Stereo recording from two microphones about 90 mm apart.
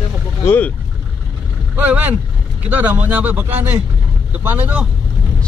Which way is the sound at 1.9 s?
20° right (ahead or behind).